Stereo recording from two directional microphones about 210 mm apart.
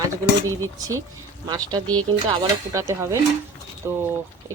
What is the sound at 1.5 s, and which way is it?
Speech, 20° right (ahead or behind).